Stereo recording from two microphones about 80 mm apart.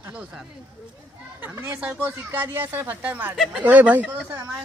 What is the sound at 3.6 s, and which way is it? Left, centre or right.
Speech, centre.